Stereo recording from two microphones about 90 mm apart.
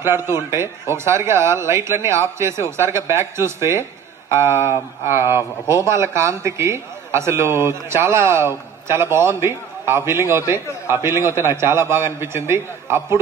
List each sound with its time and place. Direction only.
0.0 s a man's voice: 30° right (ahead or behind)